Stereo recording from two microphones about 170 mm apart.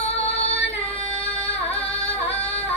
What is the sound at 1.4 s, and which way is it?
Singing, 35° left (ahead or behind).